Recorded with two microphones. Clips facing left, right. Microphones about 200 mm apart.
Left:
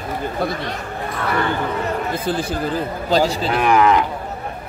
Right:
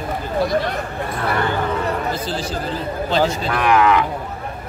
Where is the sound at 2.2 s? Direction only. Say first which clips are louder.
Left 3 dB; 55° left (ahead or behind).